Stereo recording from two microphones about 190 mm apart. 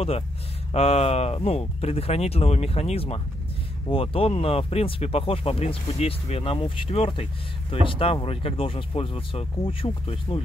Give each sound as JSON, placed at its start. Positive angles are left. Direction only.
{"t": 0.7, "sound": "speech", "side_deg": 30}